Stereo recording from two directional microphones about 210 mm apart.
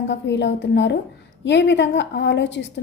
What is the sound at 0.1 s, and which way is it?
A woman's voice, 55° left (ahead or behind).